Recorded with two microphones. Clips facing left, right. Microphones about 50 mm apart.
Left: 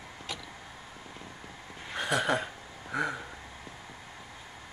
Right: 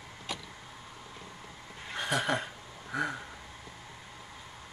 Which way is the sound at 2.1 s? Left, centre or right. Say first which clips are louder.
Left 2 dB; left.